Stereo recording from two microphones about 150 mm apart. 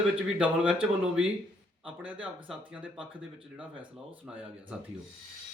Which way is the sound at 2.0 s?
10° right (ahead or behind).